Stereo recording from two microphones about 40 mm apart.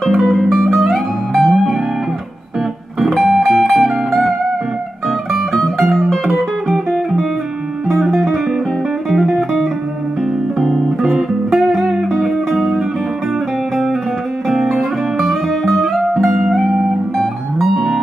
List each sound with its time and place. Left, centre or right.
0.0 s music: centre
3.0 s music: centre
8.1 s guitar: centre
9.1 s music: centre
10.6 s music: centre
11.0 s music: centre
14.5 s music: centre